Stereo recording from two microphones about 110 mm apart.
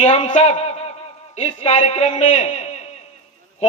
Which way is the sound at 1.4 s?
80° left.